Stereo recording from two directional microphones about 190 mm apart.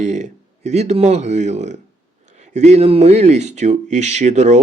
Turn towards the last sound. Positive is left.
turn(degrees=-35)  # may be behind; listen again after turning